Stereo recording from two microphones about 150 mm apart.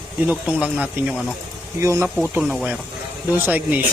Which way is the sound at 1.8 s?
20° right (ahead or behind).